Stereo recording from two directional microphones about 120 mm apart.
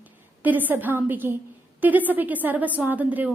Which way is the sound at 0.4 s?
15° right (ahead or behind).